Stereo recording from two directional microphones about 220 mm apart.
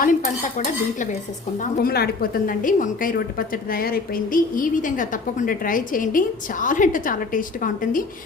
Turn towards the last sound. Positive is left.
turn(degrees=40)  # may be behind; listen again after turning